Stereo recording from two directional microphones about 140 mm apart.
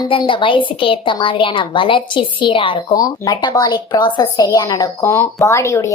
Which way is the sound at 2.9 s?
25° left (ahead or behind).